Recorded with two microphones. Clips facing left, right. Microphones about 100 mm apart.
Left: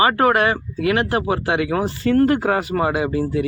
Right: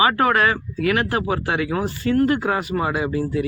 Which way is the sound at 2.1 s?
40° left (ahead or behind).